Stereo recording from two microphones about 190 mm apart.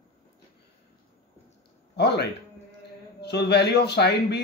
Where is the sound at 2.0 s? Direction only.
60° left (ahead or behind).